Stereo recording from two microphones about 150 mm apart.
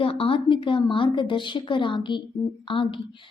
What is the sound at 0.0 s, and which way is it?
A woman's voice, 35° left (ahead or behind).